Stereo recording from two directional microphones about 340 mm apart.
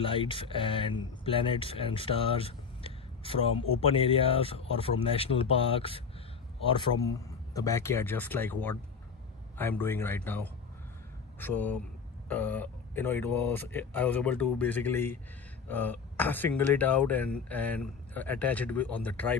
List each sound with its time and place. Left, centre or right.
0.0 s speech: centre